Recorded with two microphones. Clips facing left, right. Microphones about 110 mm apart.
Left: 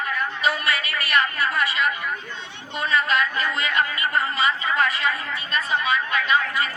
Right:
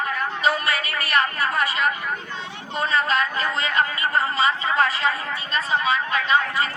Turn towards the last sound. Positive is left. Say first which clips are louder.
# right 1 dB
turn(degrees=-30)  # may be behind; listen again after turning